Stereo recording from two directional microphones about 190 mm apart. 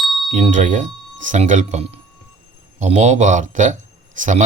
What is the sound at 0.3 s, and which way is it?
Speech, 40° right (ahead or behind).